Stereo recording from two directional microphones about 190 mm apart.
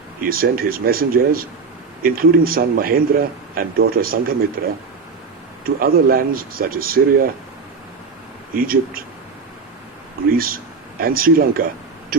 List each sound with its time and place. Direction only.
0.2 s speech: 50° right (ahead or behind)
8.5 s speech: 50° right (ahead or behind)
10.2 s speech: 50° right (ahead or behind)